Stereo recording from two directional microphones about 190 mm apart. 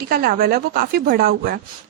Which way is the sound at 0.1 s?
55° right (ahead or behind).